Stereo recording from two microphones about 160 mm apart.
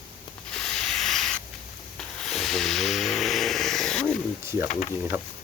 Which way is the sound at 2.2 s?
Centre (ahead or behind).